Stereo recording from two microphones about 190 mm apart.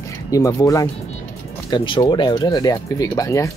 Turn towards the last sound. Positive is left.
turn(degrees=15)  # may be behind; listen again after turning